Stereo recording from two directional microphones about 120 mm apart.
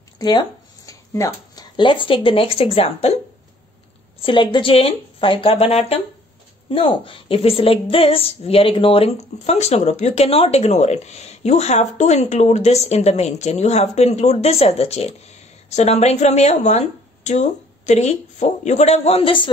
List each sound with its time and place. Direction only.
0.2 s a sound: 35° left (ahead or behind)
1.1 s speech: 30° left (ahead or behind); by 3.2 s 55° left (ahead or behind)
4.2 s speech: 40° left (ahead or behind); by 6.0 s 60° left (ahead or behind)
6.7 s a woman's voice: 50° left (ahead or behind)